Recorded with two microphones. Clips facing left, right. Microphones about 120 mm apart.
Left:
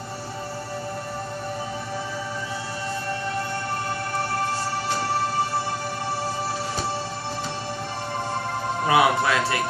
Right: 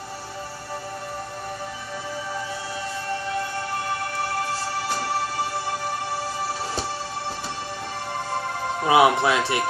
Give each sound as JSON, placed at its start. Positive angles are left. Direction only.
{"t": 8.8, "sound": "speech", "side_deg": -20}